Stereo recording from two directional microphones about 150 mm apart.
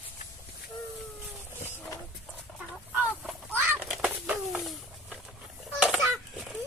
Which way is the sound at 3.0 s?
10° right (ahead or behind).